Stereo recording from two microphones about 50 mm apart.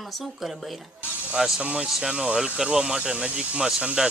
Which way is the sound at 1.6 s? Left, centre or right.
Right.